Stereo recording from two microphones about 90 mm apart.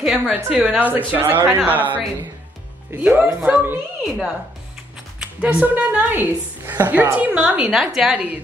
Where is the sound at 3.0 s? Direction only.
15° right (ahead or behind).